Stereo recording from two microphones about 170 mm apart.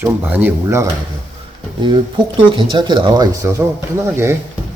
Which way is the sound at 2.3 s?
25° right (ahead or behind).